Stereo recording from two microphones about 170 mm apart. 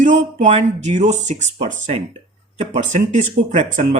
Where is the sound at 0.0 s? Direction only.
45° right (ahead or behind).